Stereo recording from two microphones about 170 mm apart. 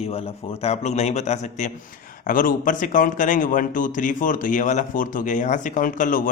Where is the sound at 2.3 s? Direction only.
55° left (ahead or behind).